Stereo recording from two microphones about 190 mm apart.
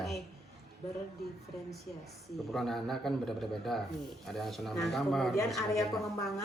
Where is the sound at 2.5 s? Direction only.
Centre (ahead or behind).